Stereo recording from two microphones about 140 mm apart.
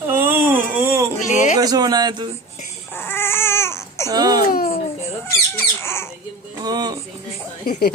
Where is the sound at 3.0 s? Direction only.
15° left (ahead or behind).